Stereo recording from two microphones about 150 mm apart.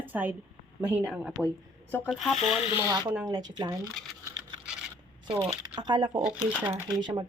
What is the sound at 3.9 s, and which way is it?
Speech, centre (ahead or behind).